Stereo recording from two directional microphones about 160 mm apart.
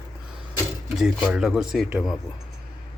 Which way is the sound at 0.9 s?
5° right (ahead or behind).